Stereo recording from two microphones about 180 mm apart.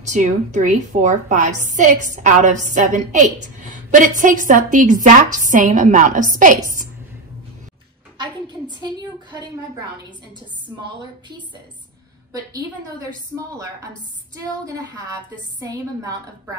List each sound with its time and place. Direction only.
0.0 s a woman's voice: 40° right (ahead or behind)
9.4 s a woman's voice: 25° right (ahead or behind)
12.3 s a woman's voice: 20° right (ahead or behind)
14.3 s a woman's voice: 20° right (ahead or behind)